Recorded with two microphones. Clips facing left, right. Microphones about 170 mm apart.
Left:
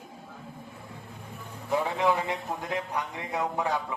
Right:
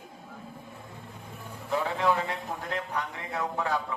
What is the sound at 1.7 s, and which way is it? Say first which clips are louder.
A man's voice: left 1 dB; 15° left (ahead or behind).